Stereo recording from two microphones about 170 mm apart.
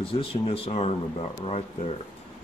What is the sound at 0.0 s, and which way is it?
Speech, 30° left (ahead or behind).